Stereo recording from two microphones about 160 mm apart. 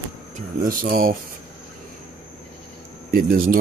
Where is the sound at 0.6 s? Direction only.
65° right (ahead or behind).